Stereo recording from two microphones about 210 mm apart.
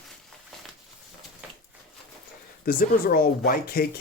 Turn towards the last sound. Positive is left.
turn(degrees=45)  # may be behind; listen again after turning